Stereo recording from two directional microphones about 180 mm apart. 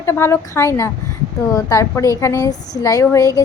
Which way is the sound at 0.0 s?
15° left (ahead or behind).